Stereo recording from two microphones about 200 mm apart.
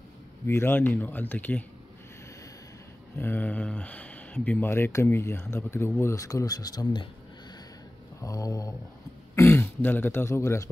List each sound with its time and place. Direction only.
0.5 s speech: 10° left (ahead or behind)
3.2 s speech: 10° left (ahead or behind)
8.2 s speech: 15° left (ahead or behind)